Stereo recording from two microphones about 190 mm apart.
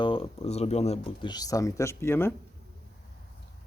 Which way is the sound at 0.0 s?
30° left (ahead or behind).